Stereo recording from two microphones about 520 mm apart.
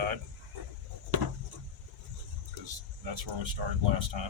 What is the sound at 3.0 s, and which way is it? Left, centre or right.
Speech, right.